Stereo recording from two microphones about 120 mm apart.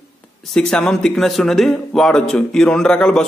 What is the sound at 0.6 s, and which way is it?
Speech, 5° left (ahead or behind).